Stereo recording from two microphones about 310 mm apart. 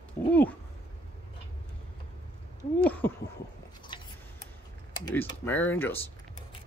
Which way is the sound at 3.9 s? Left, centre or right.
Centre.